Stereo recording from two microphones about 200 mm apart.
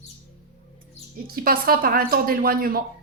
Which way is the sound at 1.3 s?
45° right (ahead or behind).